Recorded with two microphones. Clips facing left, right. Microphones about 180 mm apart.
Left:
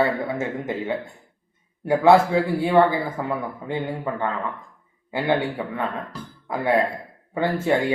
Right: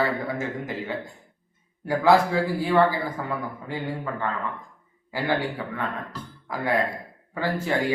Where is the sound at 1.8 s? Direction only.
25° left (ahead or behind).